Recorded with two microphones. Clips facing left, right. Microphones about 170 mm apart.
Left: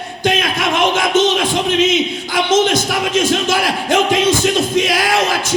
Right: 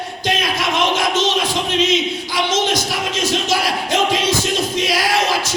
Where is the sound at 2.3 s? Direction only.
50° left (ahead or behind).